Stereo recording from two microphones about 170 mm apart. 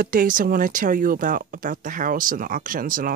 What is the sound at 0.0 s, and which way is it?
Speech, 55° right (ahead or behind).